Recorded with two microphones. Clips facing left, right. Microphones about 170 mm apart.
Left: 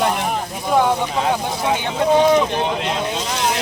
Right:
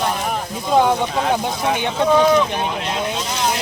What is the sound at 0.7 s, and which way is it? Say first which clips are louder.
Speech: right 1 dB; 20° right (ahead or behind).